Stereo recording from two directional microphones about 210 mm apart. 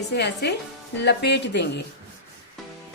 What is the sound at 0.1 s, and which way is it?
A woman's voice, 55° left (ahead or behind).